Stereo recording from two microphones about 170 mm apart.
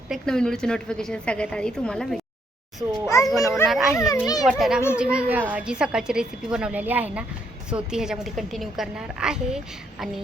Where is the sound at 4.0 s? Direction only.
20° left (ahead or behind).